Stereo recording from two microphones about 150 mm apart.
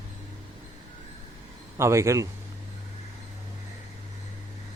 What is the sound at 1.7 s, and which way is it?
Speech, 20° right (ahead or behind).